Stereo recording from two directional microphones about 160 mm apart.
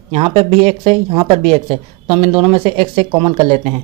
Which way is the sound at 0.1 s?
40° right (ahead or behind).